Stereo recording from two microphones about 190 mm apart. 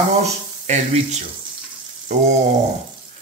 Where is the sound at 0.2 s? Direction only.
35° right (ahead or behind).